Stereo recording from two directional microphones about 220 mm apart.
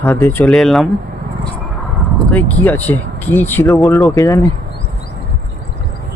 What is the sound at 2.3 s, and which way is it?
Speech, 5° left (ahead or behind).